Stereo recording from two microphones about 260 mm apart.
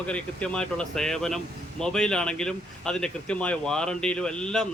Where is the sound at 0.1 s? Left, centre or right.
Centre.